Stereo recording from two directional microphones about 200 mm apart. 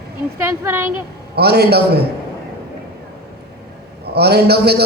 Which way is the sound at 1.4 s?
50° right (ahead or behind).